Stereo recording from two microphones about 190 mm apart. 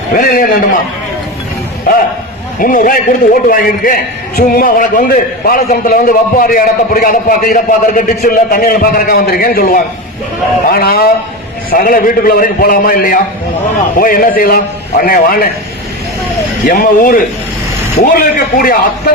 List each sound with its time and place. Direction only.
0.2 s a man's voice: 50° left (ahead or behind)
2.6 s a man's voice: 45° left (ahead or behind)
16.6 s a man's voice: 50° left (ahead or behind)